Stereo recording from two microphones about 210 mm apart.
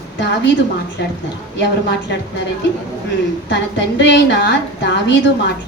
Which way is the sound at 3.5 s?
55° left (ahead or behind).